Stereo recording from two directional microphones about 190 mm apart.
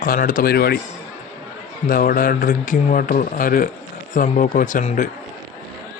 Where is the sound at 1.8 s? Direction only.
50° left (ahead or behind).